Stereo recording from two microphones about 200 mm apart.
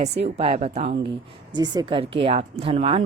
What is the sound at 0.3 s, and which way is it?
Speech, 30° right (ahead or behind).